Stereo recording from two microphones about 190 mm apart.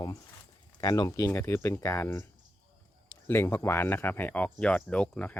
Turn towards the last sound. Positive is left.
turn(degrees=5)  # may be behind; listen again after turning